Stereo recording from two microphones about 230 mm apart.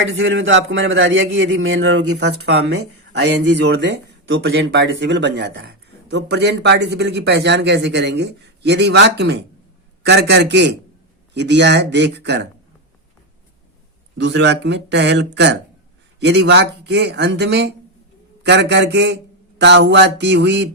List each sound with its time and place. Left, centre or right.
0.0 s a man's voice: right
3.1 s speech: right
14.2 s speech: right